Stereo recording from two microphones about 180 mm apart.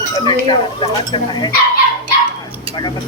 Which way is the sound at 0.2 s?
25° left (ahead or behind).